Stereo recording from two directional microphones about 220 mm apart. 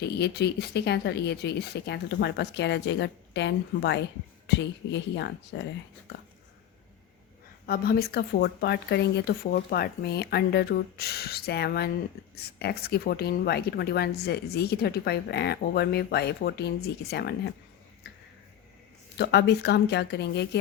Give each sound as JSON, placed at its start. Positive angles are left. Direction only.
{"t": 0.0, "sound": "speech", "side_deg": 50}
{"t": 7.7, "sound": "speech", "side_deg": 45}
{"t": 19.1, "sound": "speech", "side_deg": 50}